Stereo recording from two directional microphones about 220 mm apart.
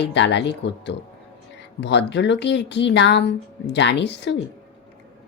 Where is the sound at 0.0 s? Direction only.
50° left (ahead or behind).